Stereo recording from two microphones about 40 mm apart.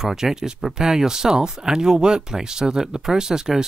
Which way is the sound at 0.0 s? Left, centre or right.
Centre.